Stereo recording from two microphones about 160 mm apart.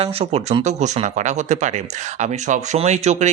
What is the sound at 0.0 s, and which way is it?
Speech, 40° right (ahead or behind).